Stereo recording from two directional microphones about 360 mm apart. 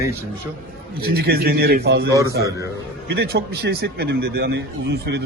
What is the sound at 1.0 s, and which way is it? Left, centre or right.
Speech, right.